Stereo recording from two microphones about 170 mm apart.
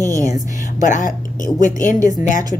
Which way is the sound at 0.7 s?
45° left (ahead or behind).